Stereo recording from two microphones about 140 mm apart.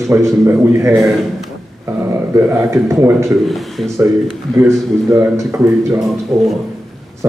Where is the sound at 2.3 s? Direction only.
15° right (ahead or behind).